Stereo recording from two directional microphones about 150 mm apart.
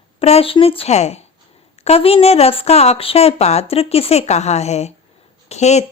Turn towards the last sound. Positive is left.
turn(degrees=50)  # may be behind; listen again after turning